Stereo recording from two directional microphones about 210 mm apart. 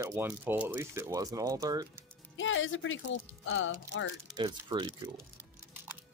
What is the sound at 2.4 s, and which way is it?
Speech, 65° left (ahead or behind).